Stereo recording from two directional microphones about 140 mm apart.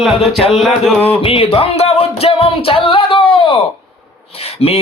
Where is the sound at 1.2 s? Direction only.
40° left (ahead or behind).